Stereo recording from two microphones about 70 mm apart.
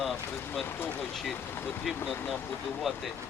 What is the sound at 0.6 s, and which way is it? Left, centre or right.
Speech, left.